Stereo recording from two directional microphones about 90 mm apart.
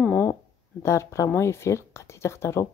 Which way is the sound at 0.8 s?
35° left (ahead or behind).